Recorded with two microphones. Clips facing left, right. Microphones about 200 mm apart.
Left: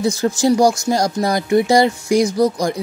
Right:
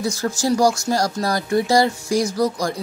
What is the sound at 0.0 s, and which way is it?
Speech, 20° left (ahead or behind).